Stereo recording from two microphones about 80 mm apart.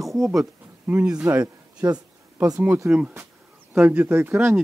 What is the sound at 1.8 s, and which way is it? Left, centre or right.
Speech, right.